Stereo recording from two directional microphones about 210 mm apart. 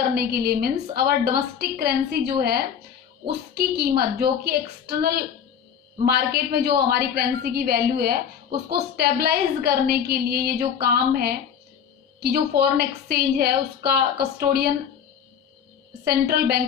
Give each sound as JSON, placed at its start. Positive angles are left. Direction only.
{"t": 0.1, "sound": "a woman's voice", "side_deg": -50}
{"t": 16.0, "sound": "a woman's voice", "side_deg": -45}